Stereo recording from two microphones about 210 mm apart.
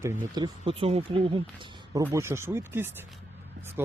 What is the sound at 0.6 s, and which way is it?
Speech, 25° right (ahead or behind).